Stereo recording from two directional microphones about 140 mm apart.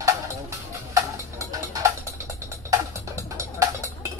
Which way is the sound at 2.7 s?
20° right (ahead or behind).